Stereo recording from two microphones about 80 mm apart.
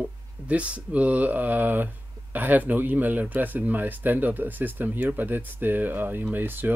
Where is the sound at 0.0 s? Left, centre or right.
Centre.